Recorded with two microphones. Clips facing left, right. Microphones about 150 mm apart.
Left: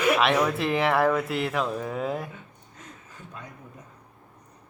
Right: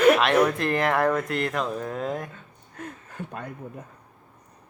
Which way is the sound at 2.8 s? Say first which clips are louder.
Right 10 dB; 60° right (ahead or behind).